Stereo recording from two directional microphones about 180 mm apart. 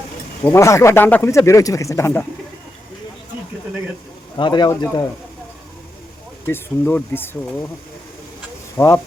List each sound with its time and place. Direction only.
0.5 s speech: 15° left (ahead or behind)
4.4 s speech: 25° left (ahead or behind)
6.4 s speech: 10° left (ahead or behind)
8.8 s speech: 10° left (ahead or behind)